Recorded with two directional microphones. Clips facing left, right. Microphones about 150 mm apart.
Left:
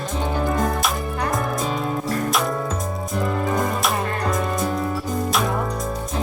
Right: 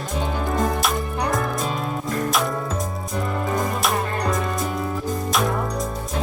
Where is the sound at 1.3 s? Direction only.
Centre (ahead or behind).